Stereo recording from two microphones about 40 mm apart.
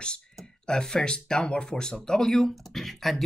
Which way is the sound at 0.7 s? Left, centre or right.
Centre.